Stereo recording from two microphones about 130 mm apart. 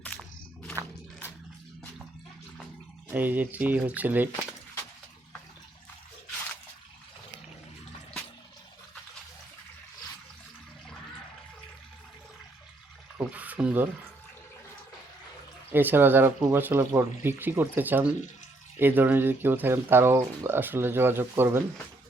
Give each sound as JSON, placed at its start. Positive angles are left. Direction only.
{"t": 3.1, "sound": "speech", "side_deg": -15}
{"t": 13.1, "sound": "a sound", "side_deg": -10}
{"t": 15.7, "sound": "speech", "side_deg": -15}